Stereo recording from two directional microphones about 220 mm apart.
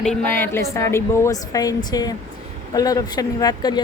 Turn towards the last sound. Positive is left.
turn(degrees=20)  # may be behind; listen again after turning